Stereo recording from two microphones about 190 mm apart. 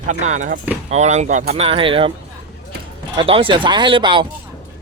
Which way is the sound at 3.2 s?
30° right (ahead or behind).